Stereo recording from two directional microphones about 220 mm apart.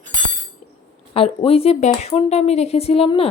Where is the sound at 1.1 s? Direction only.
25° left (ahead or behind).